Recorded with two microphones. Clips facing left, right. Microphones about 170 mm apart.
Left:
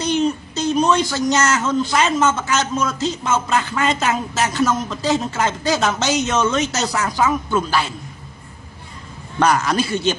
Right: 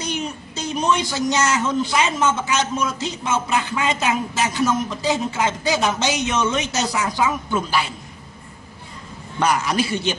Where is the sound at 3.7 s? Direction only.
10° right (ahead or behind).